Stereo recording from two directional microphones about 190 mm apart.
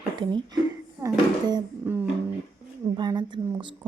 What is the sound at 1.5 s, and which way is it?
A child's voice, 20° right (ahead or behind).